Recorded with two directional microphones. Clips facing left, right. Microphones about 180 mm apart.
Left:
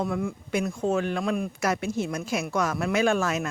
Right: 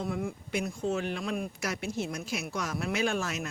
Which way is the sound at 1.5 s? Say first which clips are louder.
Left 8 dB; 90° left.